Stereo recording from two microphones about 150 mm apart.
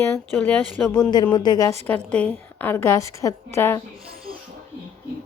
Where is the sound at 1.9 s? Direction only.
10° left (ahead or behind).